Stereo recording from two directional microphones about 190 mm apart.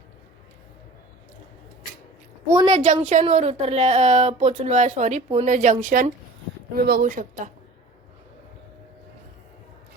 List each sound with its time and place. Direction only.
2.6 s a woman's voice: 40° right (ahead or behind)